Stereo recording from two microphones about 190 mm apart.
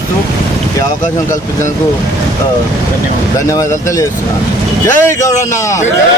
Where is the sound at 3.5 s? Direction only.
15° left (ahead or behind).